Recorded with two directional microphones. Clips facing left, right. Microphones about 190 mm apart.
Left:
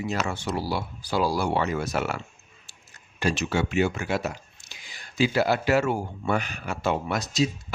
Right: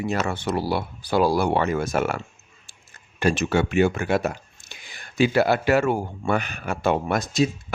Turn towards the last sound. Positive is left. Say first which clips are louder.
# right 4 dB
turn(degrees=-55)  # may be behind; listen again after turning